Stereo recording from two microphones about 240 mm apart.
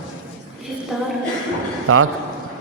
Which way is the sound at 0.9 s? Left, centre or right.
Centre.